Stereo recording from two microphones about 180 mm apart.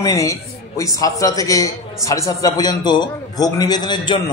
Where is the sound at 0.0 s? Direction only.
15° left (ahead or behind).